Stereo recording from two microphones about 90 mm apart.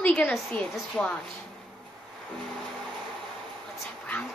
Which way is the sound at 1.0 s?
35° left (ahead or behind).